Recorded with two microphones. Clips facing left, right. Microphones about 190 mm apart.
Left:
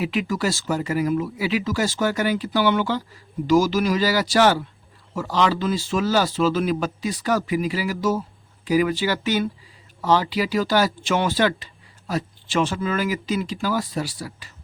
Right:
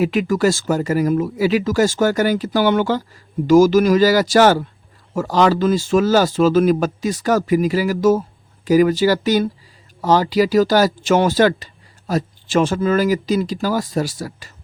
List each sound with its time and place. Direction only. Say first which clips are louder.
0.0 s speech: right 7 dB; 45° right (ahead or behind)